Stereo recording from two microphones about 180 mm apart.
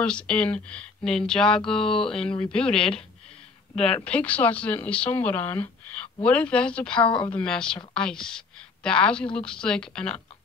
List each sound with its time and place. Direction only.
0.0 s a woman's voice: 5° left (ahead or behind)
7.0 s a woman's voice: 25° left (ahead or behind)
7.2 s a woman's voice: 5° left (ahead or behind)